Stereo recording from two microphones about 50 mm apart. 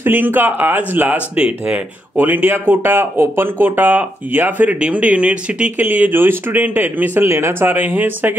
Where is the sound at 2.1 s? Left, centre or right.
Right.